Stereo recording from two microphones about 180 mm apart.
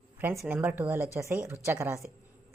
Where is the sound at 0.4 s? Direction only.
10° right (ahead or behind).